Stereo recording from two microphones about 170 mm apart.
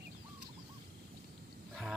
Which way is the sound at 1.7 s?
5° right (ahead or behind).